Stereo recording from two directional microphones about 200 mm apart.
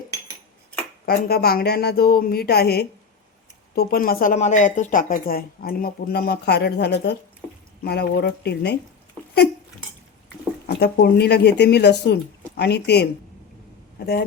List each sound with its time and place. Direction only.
1.0 s speech: 50° left (ahead or behind)
10.8 s speech: 55° left (ahead or behind)